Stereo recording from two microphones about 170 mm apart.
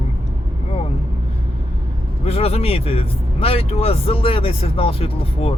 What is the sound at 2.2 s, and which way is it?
Speech, 35° left (ahead or behind).